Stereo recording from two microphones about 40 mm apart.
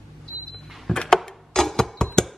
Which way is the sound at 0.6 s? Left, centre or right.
Centre.